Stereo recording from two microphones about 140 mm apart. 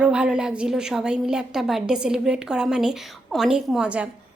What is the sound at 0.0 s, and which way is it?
A woman's voice, 5° right (ahead or behind).